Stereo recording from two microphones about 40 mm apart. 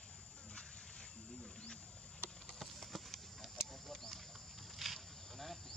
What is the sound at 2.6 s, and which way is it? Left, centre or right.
Clip-clop, centre.